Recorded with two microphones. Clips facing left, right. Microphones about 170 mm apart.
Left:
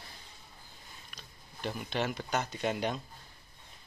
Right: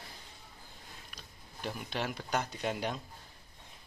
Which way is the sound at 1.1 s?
5° right (ahead or behind).